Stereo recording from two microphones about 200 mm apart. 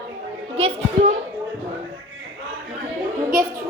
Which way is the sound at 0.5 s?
35° right (ahead or behind).